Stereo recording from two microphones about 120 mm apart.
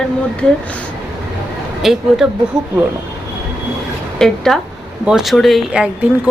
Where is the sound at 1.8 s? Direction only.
Centre (ahead or behind).